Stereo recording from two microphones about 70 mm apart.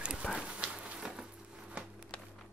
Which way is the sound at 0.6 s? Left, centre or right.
Centre.